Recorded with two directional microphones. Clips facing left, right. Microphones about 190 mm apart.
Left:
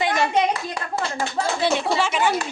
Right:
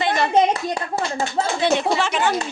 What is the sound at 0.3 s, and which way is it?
Speech, 25° right (ahead or behind).